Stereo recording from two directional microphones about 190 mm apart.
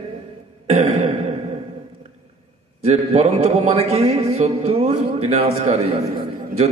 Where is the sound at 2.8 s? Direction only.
35° right (ahead or behind).